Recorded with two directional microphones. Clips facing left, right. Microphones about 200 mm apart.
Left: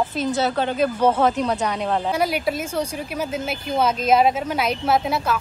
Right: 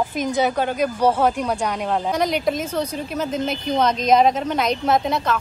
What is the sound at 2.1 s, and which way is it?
Speech, 5° left (ahead or behind).